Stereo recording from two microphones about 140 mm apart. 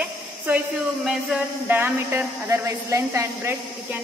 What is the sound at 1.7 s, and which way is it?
A woman's voice, 15° right (ahead or behind).